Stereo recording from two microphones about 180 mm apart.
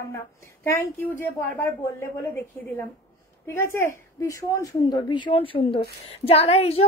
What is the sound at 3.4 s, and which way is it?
A woman's voice, 15° left (ahead or behind).